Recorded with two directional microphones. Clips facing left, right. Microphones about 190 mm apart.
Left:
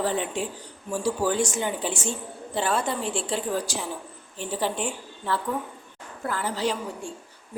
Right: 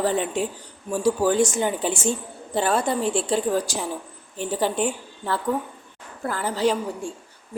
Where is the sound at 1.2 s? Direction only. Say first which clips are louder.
Right 5 dB; 45° right (ahead or behind).